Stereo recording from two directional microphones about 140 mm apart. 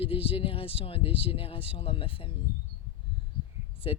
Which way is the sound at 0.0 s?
40° left (ahead or behind).